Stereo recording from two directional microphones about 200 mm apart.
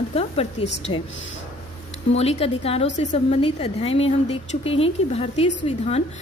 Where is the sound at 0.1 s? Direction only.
30° left (ahead or behind).